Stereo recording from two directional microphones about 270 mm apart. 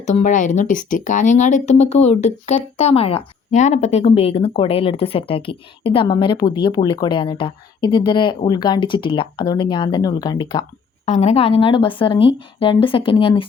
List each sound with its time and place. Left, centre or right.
0.0 s a woman's voice: left